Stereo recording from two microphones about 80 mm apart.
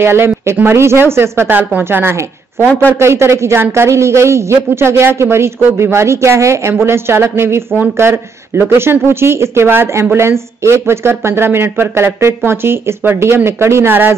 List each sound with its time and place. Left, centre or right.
0.0 s speech: right
7.7 s speech: centre
8.1 s speech: right